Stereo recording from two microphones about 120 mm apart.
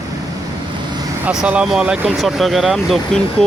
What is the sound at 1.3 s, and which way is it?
Speech, 10° right (ahead or behind).